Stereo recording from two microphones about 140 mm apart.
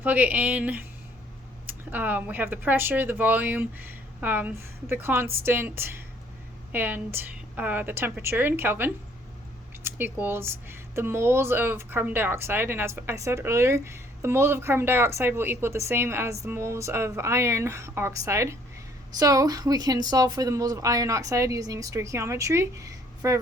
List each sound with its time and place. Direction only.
0.0 s speech: 10° right (ahead or behind)